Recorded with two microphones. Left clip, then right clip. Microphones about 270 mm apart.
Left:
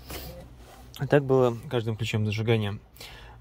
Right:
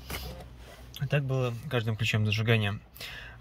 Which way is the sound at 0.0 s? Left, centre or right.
Centre.